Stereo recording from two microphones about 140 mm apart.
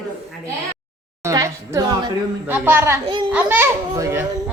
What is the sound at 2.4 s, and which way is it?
A child's voice, 15° right (ahead or behind).